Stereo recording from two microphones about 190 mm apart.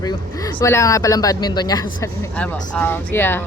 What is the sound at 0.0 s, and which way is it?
Speech, 20° left (ahead or behind).